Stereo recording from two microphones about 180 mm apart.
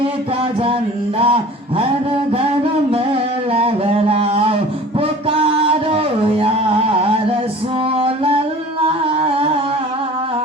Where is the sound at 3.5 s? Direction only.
30° right (ahead or behind).